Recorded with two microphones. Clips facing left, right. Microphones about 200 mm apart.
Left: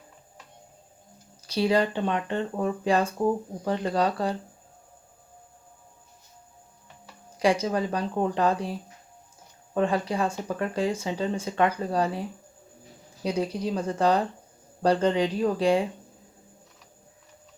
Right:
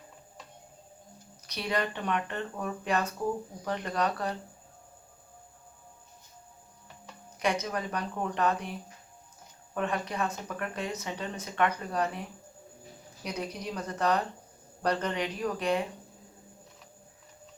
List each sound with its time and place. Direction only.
1.5 s speech: 30° left (ahead or behind)
7.3 s speech: 30° left (ahead or behind)
9.7 s speech: 30° left (ahead or behind)
13.2 s speech: 30° left (ahead or behind)